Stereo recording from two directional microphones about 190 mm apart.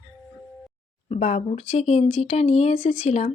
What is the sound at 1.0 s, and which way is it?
Speech, 35° left (ahead or behind).